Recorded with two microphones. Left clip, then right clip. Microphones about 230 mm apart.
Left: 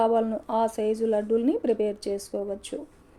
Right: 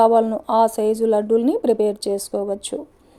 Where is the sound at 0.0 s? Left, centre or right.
Right.